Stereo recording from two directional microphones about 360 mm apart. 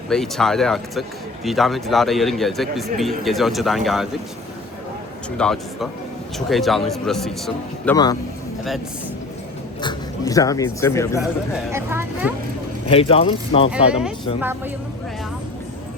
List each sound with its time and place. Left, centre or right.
0.1 s a man's voice: centre
5.4 s a man's voice: centre
9.8 s speech: centre
11.7 s speech: centre
12.9 s speech: centre
13.7 s a man's voice: centre